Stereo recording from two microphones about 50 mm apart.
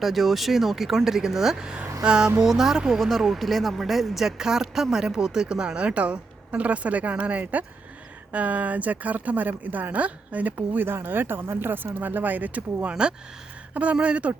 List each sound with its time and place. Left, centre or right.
0.0 s speech: centre
2.4 s speech: centre
3.0 s a woman's voice: centre; by 12.9 s right
12.9 s speech: centre